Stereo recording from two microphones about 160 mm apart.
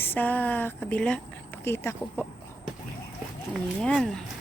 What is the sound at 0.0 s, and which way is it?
Speech, 10° left (ahead or behind).